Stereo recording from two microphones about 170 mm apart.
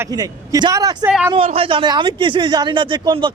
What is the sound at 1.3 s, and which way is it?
Speech, 35° right (ahead or behind).